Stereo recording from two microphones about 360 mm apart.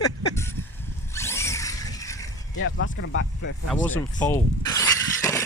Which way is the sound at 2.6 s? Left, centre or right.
Left.